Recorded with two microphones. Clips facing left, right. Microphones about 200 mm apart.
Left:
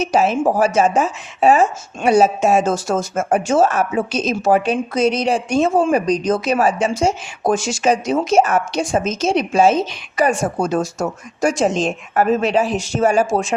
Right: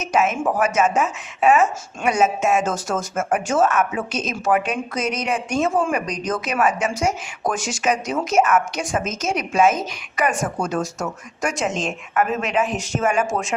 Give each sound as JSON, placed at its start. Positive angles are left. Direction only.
{"t": 0.0, "sound": "speech", "side_deg": 35}